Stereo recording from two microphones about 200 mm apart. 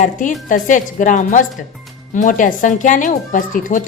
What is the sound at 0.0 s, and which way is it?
Speech, 40° left (ahead or behind).